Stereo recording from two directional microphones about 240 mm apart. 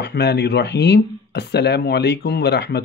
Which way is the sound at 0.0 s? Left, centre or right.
Left.